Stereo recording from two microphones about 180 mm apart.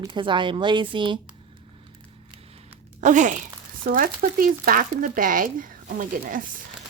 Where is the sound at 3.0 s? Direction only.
45° right (ahead or behind).